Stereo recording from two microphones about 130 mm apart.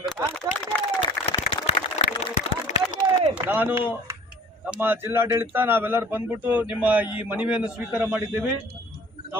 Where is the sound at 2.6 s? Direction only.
70° left (ahead or behind).